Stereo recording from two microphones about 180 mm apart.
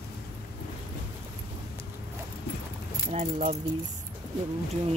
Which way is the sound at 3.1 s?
40° right (ahead or behind).